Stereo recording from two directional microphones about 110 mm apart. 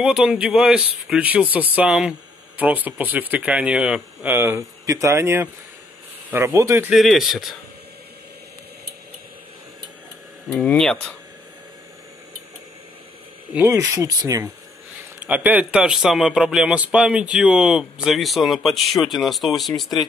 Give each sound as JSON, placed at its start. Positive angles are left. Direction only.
{"t": 0.0, "sound": "speech", "side_deg": -10}
{"t": 6.9, "sound": "a man's voice", "side_deg": 0}
{"t": 10.5, "sound": "speech", "side_deg": 10}
{"t": 13.7, "sound": "speech", "side_deg": -30}
{"t": 15.1, "sound": "a man's voice", "side_deg": -15}